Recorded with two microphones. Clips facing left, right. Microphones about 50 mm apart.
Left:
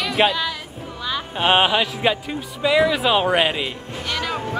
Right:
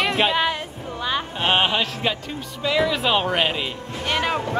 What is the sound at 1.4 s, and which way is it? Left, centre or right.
Music, centre.